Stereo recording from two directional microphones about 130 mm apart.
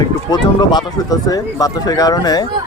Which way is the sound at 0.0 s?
35° left (ahead or behind).